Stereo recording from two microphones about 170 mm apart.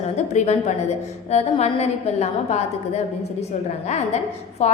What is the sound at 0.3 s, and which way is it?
A woman's voice, 40° left (ahead or behind).